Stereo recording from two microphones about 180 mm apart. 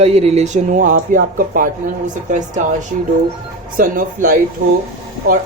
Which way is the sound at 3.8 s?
50° right (ahead or behind).